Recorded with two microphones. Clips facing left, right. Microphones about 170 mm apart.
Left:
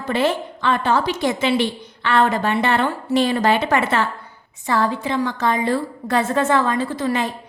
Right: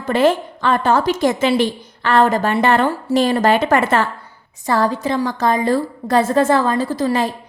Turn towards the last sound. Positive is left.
turn(degrees=-35)  # may be behind; listen again after turning